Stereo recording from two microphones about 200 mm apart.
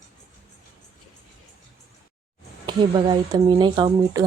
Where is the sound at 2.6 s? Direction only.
20° right (ahead or behind).